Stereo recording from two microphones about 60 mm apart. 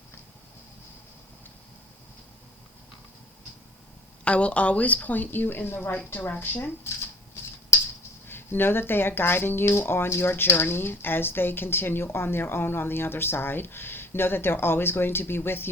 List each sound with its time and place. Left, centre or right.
4.2 s a woman's voice: centre; by 6.9 s left
8.3 s speech: left